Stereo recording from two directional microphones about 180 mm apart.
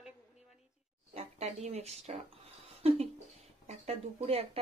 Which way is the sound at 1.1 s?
35° right (ahead or behind).